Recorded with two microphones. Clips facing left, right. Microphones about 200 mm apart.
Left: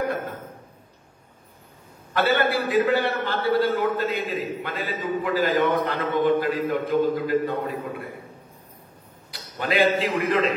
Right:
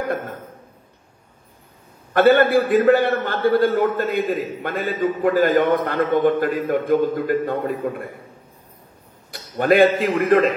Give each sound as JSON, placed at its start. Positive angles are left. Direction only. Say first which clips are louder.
{"t": 2.1, "sound": "a man's voice", "louder": "right 8 dB", "side_deg": -50}
{"t": 9.3, "sound": "a man's voice", "louder": "right 9 dB", "side_deg": -50}